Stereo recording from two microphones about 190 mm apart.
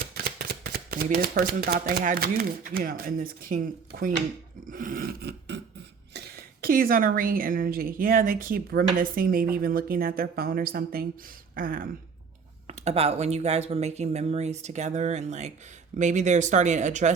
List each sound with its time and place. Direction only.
0.0 s a woman's voice: 55° right (ahead or behind)
4.7 s filing: 45° right (ahead or behind)
6.1 s a woman's voice: 50° right (ahead or behind)
12.6 s speech: 35° right (ahead or behind)